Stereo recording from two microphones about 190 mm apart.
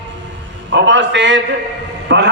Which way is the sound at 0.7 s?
70° right (ahead or behind).